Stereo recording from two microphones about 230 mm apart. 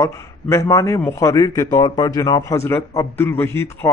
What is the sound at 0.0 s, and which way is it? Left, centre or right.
A man's voice, centre.